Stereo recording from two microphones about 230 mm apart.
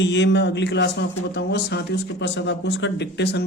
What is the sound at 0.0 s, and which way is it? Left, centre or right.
Speech, left.